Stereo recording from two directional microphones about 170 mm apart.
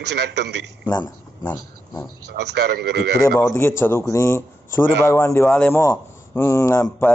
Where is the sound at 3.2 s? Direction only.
15° left (ahead or behind).